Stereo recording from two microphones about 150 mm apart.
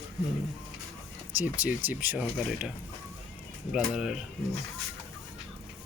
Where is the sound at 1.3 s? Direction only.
10° right (ahead or behind).